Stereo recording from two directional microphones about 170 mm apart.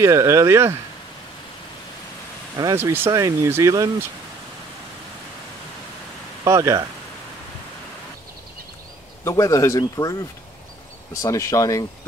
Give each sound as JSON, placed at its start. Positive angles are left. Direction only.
{"t": 0.0, "sound": "speech", "side_deg": -20}
{"t": 2.5, "sound": "speech", "side_deg": -20}
{"t": 6.4, "sound": "speech", "side_deg": -20}
{"t": 9.2, "sound": "speech", "side_deg": 15}
{"t": 11.2, "sound": "speech", "side_deg": 20}